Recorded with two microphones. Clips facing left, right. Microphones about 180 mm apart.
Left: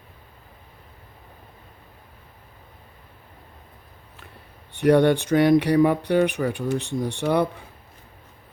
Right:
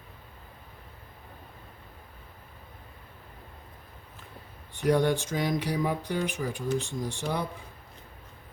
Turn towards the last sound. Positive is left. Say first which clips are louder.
# left 9 dB
turn(degrees=65)  # may be behind; listen again after turning